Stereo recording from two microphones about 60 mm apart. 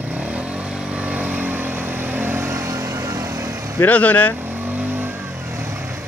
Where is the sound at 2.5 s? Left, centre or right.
Right.